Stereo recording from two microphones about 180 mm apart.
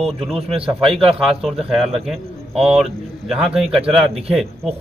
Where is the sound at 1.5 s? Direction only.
35° right (ahead or behind).